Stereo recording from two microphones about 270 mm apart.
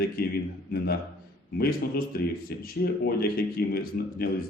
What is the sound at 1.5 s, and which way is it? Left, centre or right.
A man's voice, left.